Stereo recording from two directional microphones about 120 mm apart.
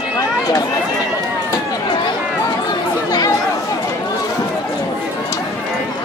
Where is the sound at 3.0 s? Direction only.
35° left (ahead or behind).